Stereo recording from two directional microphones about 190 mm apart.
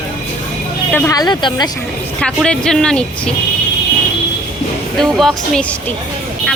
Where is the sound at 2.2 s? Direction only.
5° left (ahead or behind).